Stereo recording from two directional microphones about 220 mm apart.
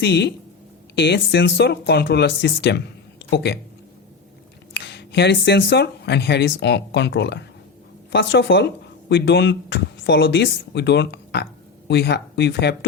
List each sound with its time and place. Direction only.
0.0 s speech: 50° left (ahead or behind)
4.7 s speech: 50° left (ahead or behind)